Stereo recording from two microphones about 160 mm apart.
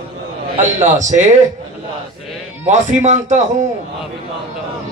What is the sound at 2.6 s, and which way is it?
A man's voice, 50° right (ahead or behind).